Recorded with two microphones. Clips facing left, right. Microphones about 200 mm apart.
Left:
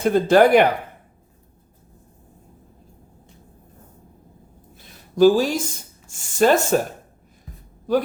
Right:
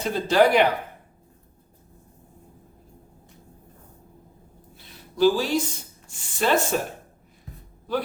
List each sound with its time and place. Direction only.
0.0 s speech: 55° left (ahead or behind)
5.1 s speech: 45° left (ahead or behind)